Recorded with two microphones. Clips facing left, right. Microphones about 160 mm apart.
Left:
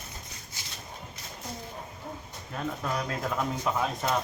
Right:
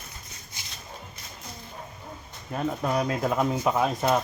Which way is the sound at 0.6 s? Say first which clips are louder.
Right 1 dB; 20° right (ahead or behind).